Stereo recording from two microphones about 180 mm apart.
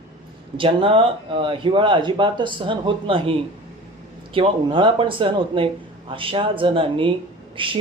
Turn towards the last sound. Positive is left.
turn(degrees=-30)  # may be behind; listen again after turning